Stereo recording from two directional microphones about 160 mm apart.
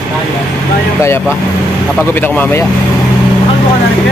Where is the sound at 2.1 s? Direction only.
10° left (ahead or behind).